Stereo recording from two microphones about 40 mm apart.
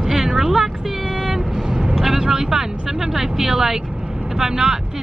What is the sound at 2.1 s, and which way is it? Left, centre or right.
Speech, centre.